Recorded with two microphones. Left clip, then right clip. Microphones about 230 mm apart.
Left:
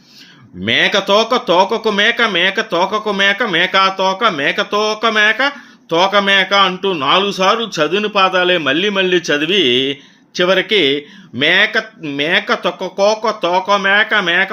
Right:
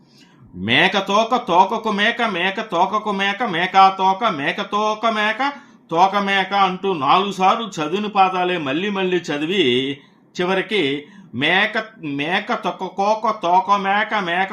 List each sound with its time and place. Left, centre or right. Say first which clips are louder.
0.6 s a man's voice: left 3 dB; centre